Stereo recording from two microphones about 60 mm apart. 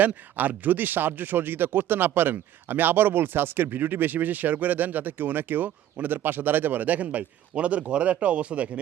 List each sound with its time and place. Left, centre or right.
0.0 s speech: right